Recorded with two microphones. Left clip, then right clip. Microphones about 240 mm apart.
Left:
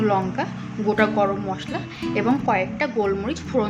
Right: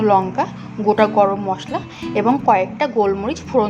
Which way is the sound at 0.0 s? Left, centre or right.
Centre.